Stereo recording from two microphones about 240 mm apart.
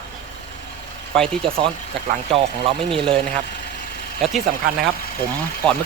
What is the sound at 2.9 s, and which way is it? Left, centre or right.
Speech, right.